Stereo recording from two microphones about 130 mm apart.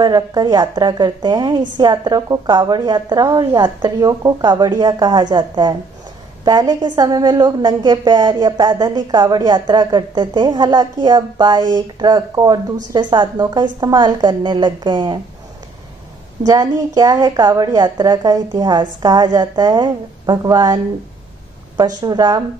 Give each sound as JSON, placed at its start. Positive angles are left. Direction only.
{"t": 0.0, "sound": "a woman's voice", "side_deg": -35}
{"t": 16.4, "sound": "a woman's voice", "side_deg": -30}